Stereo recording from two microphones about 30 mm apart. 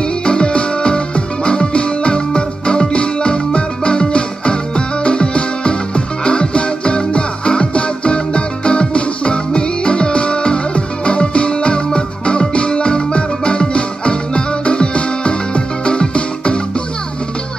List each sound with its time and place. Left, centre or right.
0.0 s music: left